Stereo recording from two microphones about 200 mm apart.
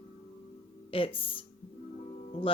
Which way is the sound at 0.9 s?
25° left (ahead or behind).